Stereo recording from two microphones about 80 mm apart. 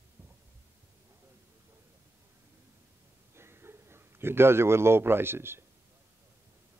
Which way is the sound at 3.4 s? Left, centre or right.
Right.